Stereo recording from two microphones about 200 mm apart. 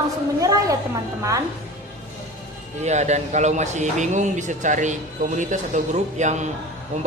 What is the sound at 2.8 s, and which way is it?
A man's voice, 35° right (ahead or behind).